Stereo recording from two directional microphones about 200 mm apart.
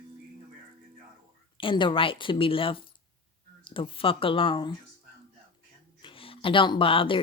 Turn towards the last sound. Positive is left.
turn(degrees=25)  # may be behind; listen again after turning